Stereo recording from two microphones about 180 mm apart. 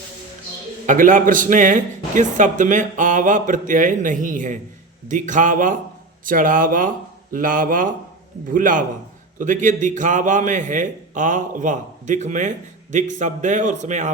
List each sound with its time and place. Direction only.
0.9 s a man's voice: 45° right (ahead or behind)